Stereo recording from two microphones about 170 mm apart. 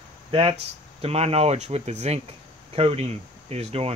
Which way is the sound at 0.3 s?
35° right (ahead or behind).